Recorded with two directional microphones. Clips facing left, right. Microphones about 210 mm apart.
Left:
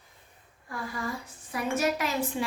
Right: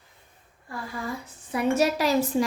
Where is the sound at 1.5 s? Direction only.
30° right (ahead or behind).